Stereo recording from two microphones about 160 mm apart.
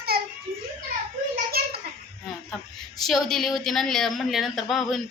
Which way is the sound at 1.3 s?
75° right (ahead or behind).